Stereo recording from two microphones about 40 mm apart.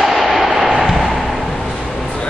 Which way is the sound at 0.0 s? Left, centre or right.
Centre.